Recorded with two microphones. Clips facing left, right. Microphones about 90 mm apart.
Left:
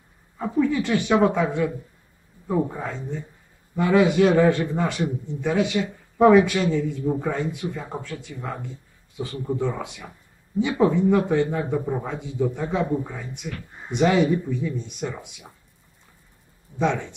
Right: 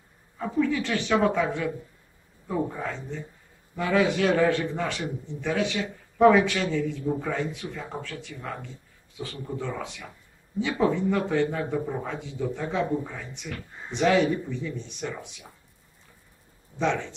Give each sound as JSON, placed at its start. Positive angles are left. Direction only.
{"t": 0.4, "sound": "a man's voice", "side_deg": 15}
{"t": 16.7, "sound": "a man's voice", "side_deg": 15}